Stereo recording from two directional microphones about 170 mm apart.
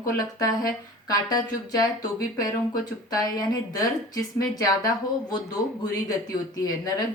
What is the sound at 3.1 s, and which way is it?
Speech, 20° left (ahead or behind).